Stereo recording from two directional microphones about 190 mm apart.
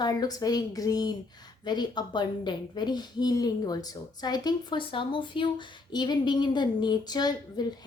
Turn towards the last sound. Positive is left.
turn(degrees=20)  # may be behind; listen again after turning